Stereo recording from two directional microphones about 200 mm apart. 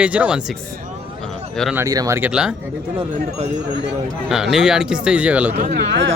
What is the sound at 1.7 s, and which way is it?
Speech, 15° right (ahead or behind).